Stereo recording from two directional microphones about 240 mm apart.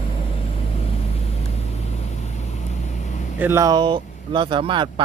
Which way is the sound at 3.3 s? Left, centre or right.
Centre.